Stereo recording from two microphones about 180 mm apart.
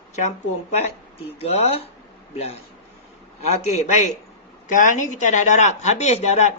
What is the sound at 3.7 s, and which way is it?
A man's voice, 40° left (ahead or behind).